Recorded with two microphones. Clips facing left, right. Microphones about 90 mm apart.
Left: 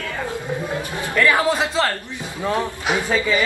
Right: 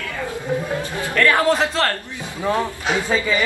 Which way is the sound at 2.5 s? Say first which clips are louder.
Left 1 dB; 15° left (ahead or behind).